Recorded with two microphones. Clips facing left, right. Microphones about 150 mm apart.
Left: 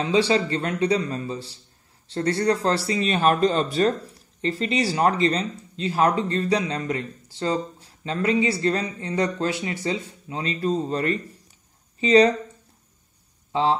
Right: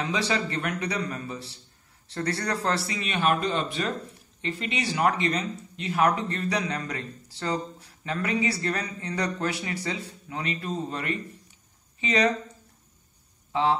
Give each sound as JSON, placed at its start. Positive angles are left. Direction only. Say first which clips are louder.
{"t": 0.0, "sound": "speech", "louder": "left 7 dB", "side_deg": 30}
{"t": 13.5, "sound": "speech", "louder": "left 2 dB", "side_deg": 25}